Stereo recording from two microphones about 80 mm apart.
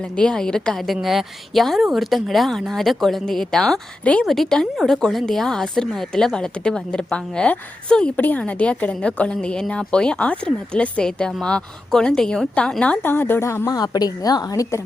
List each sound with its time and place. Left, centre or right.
0.2 s a woman's voice: centre
4.0 s a woman's voice: centre
13.1 s a woman's voice: left
13.7 s a woman's voice: left